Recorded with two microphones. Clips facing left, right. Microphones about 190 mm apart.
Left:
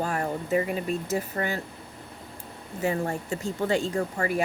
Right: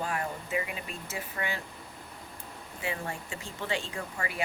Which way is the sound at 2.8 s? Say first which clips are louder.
Left 9 dB; 40° left (ahead or behind).